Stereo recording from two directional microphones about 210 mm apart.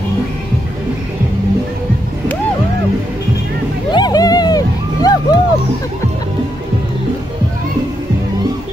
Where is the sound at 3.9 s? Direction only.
20° left (ahead or behind).